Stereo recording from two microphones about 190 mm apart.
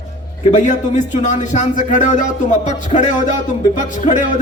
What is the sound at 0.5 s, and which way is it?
Speech, 40° left (ahead or behind).